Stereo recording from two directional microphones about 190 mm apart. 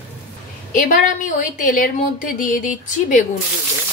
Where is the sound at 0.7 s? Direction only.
45° left (ahead or behind).